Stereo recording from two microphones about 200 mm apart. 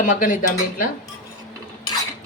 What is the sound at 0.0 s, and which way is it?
Speech, 40° left (ahead or behind).